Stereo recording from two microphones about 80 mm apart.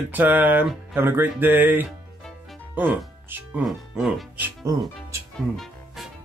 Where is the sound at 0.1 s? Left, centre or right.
Right.